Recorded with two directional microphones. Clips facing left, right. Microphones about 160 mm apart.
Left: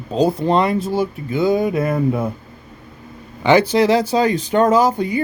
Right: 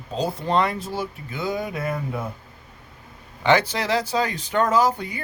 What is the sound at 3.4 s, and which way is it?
Speech, 10° left (ahead or behind).